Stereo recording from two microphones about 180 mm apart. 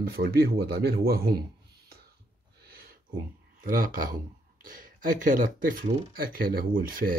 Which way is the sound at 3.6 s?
50° right (ahead or behind).